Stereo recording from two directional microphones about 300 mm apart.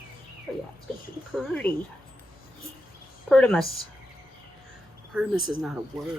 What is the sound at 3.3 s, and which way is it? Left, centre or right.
Speech, centre.